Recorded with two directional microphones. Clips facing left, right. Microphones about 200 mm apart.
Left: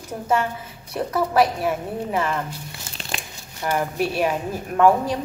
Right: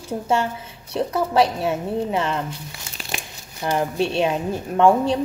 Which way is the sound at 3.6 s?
25° right (ahead or behind).